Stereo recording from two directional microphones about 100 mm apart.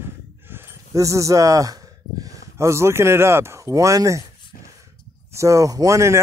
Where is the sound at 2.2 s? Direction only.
35° right (ahead or behind).